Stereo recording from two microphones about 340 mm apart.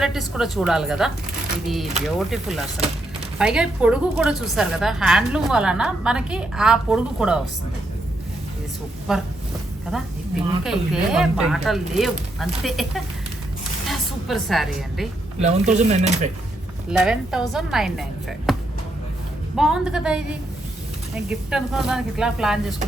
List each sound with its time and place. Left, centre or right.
0.0 s a woman's voice: centre
9.1 s a woman's voice: centre
15.4 s speech: centre
17.0 s a woman's voice: centre
19.5 s a woman's voice: centre